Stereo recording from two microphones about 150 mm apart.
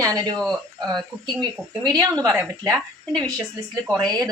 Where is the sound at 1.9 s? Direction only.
25° right (ahead or behind).